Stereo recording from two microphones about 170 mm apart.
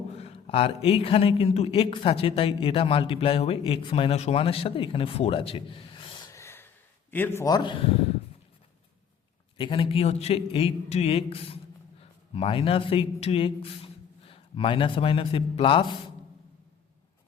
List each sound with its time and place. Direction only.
0.2 s a man's voice: 35° left (ahead or behind)
9.6 s speech: 30° left (ahead or behind)